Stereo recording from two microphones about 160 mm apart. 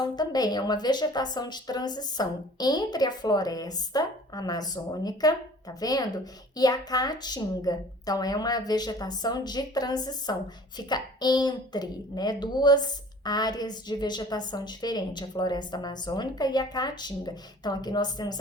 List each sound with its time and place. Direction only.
0.0 s a woman's voice: 25° left (ahead or behind)